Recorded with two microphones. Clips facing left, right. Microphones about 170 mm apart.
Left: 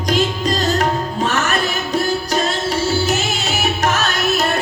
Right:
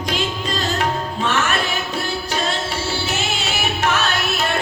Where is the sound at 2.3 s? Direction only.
40° left (ahead or behind).